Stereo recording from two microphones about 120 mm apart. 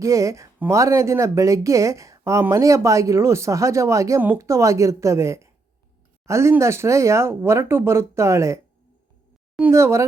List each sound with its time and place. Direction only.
0.0 s speech: 25° right (ahead or behind)
9.7 s speech: 25° right (ahead or behind)